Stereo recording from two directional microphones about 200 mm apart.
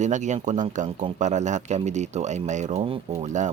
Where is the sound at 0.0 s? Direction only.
35° right (ahead or behind).